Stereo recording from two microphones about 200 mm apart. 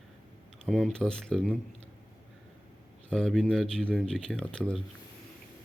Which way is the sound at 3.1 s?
Centre (ahead or behind).